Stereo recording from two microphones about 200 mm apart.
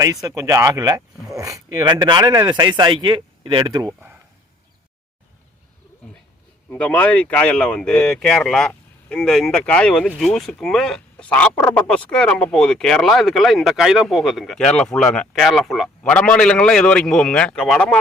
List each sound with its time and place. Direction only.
0.0 s speech: 15° right (ahead or behind)
6.7 s speech: 5° left (ahead or behind)